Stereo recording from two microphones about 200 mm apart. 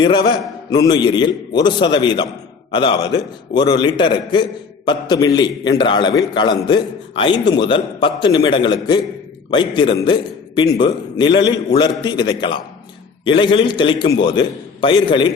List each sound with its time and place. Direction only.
0.0 s a man's voice: 25° left (ahead or behind)